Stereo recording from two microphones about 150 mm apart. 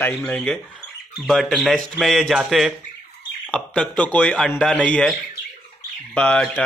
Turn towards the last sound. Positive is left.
turn(degrees=5)  # may be behind; listen again after turning